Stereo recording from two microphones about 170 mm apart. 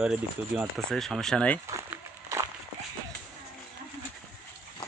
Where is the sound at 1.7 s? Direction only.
15° right (ahead or behind).